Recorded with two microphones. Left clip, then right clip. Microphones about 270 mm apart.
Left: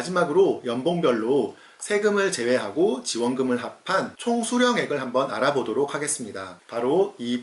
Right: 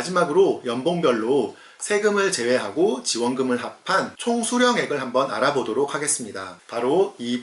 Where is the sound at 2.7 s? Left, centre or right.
Left.